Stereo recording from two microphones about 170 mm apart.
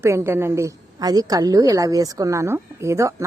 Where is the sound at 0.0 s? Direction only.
15° right (ahead or behind).